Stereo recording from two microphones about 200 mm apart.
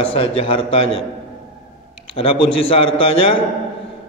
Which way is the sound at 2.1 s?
30° left (ahead or behind).